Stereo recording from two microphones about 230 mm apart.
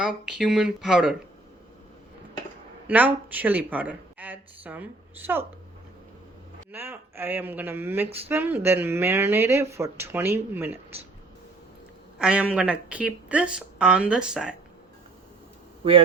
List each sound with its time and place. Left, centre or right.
0.0 s speech: centre
2.8 s speech: centre
6.7 s speech: centre
12.2 s speech: centre
15.8 s speech: right